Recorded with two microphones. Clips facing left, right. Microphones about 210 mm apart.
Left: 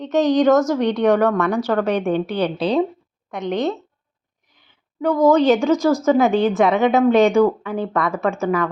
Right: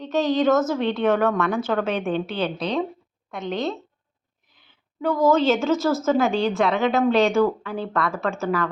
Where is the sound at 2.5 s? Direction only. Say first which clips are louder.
Left 6 dB; 30° left (ahead or behind).